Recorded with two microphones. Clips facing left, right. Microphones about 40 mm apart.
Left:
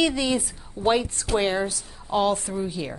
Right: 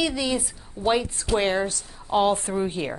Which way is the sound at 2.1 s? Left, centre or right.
Right.